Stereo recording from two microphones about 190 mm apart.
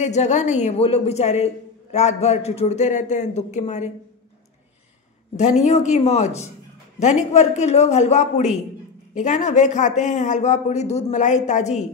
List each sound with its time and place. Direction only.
0.0 s a woman's voice: 35° left (ahead or behind)
5.3 s a woman's voice: 35° left (ahead or behind)